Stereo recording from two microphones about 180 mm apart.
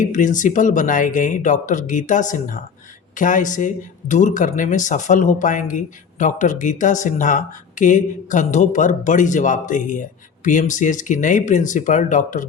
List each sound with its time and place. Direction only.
0.0 s speech: 45° left (ahead or behind)